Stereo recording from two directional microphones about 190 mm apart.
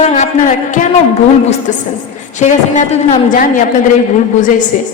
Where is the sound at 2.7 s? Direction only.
40° left (ahead or behind).